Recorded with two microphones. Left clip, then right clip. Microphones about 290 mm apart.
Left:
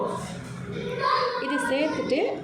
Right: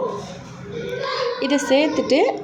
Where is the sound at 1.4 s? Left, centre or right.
Right.